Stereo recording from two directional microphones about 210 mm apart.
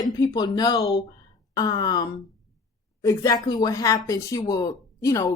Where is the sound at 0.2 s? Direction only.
20° left (ahead or behind).